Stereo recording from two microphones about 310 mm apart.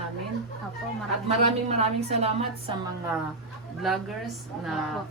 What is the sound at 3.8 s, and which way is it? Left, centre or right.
A woman's voice, centre.